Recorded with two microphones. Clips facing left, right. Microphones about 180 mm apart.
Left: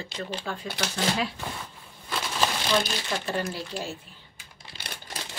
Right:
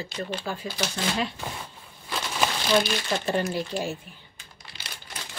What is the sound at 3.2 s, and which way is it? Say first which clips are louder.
Speech: right 4 dB; 20° right (ahead or behind).